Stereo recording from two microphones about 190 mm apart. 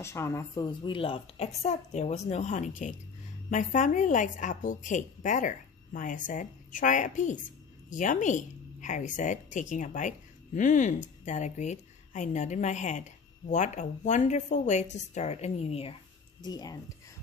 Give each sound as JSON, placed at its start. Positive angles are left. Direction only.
{"t": 0.0, "sound": "a woman's voice", "side_deg": 15}
{"t": 16.4, "sound": "speech", "side_deg": 20}